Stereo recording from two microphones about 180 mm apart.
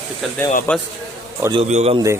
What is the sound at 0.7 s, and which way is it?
Speech, 10° left (ahead or behind).